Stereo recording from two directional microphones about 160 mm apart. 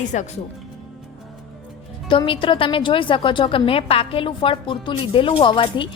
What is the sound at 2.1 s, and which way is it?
A woman's voice, 30° left (ahead or behind).